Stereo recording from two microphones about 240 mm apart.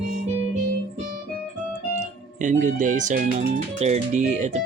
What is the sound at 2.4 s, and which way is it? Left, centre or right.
Speech, right.